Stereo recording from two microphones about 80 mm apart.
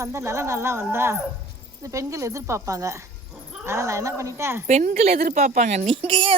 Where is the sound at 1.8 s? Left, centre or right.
Right.